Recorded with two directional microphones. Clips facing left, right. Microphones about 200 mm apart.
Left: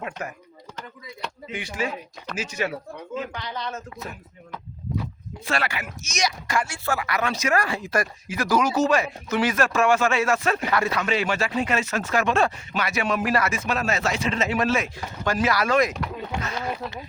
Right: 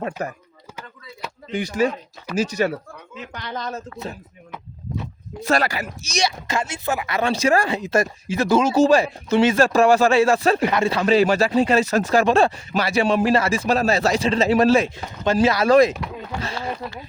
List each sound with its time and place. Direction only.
0.0 s speech: 35° right (ahead or behind)
1.2 s a sound: 5° right (ahead or behind)
1.5 s speech: 40° right (ahead or behind)
5.4 s speech: 40° right (ahead or behind)
14.9 s speech: 25° right (ahead or behind)